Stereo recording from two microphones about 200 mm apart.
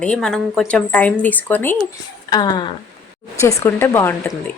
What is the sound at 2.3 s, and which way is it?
Speech, 20° left (ahead or behind).